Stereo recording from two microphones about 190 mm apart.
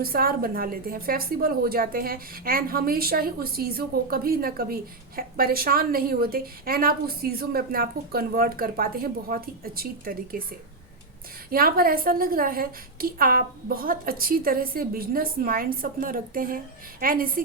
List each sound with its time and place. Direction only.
0.0 s a woman's voice: 50° right (ahead or behind)
11.5 s a woman's voice: 50° right (ahead or behind)